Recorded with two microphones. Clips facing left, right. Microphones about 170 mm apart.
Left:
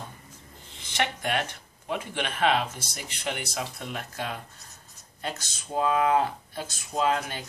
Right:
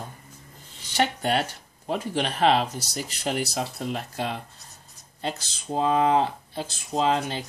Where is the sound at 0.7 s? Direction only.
35° right (ahead or behind).